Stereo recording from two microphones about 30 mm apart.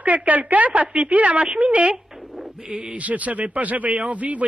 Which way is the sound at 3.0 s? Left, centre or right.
Right.